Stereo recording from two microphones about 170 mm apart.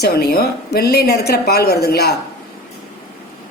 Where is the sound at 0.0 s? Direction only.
70° left (ahead or behind).